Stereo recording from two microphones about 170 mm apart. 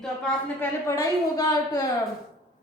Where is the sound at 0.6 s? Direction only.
15° left (ahead or behind).